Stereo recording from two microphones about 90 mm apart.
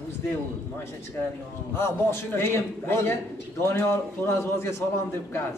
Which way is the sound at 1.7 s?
25° left (ahead or behind).